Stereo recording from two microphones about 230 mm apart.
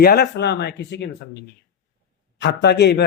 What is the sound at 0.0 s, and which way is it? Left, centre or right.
Speech, left.